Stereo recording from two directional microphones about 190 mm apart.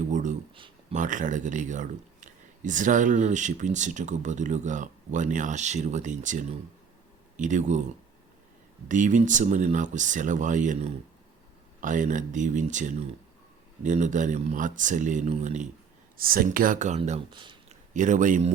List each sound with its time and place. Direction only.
0.1 s speech: 40° right (ahead or behind)
0.5 s a sound: 25° right (ahead or behind)
0.9 s speech: 40° right (ahead or behind)
8.9 s speech: 40° right (ahead or behind)
16.1 s speech: 50° right (ahead or behind); by 17.7 s 25° right (ahead or behind)
17.9 s speech: 40° right (ahead or behind)